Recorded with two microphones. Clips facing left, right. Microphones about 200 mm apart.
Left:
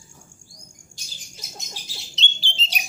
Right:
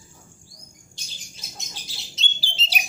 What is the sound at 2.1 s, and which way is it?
Bird, 5° right (ahead or behind).